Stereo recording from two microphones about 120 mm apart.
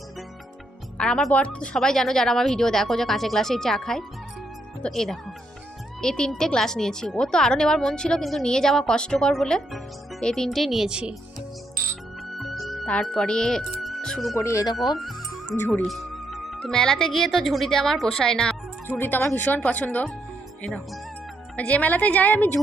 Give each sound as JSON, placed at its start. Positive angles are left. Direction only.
{"t": 0.9, "sound": "speech", "side_deg": 5}
{"t": 12.4, "sound": "music", "side_deg": 0}
{"t": 14.3, "sound": "speech", "side_deg": 25}
{"t": 15.9, "sound": "speech", "side_deg": 0}
{"t": 18.9, "sound": "speech", "side_deg": 15}